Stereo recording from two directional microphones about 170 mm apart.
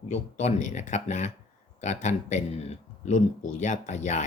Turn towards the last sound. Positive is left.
turn(degrees=45)  # may be behind; listen again after turning